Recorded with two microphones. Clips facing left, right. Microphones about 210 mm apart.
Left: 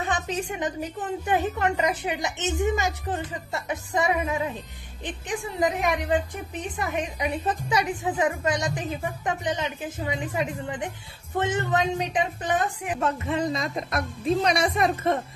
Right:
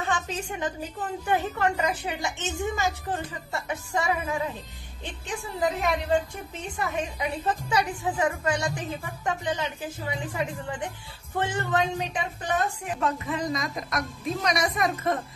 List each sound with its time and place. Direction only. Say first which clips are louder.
0.0 s a sound: left 2 dB; 15° left (ahead or behind)
1.2 s a woman's voice: left 1 dB; 15° left (ahead or behind)
13.0 s a woman's voice: left 2 dB; 30° left (ahead or behind)